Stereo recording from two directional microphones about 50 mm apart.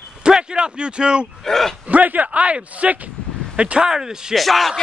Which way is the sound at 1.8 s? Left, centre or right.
Right.